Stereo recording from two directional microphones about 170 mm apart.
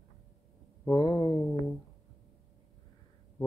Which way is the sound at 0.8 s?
20° left (ahead or behind).